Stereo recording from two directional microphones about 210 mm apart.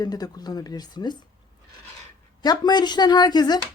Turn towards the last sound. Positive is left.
turn(degrees=20)  # may be behind; listen again after turning